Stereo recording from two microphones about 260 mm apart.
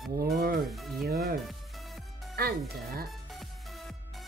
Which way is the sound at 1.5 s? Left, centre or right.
Centre.